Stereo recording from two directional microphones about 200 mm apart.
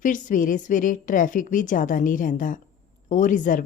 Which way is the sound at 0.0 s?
40° left (ahead or behind).